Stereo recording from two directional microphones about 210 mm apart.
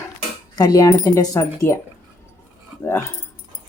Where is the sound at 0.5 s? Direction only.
20° left (ahead or behind).